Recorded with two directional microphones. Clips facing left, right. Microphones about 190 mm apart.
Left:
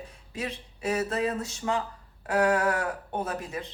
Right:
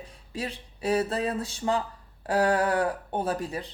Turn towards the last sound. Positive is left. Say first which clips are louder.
# right 3 dB
turn(degrees=-35)  # may be behind; listen again after turning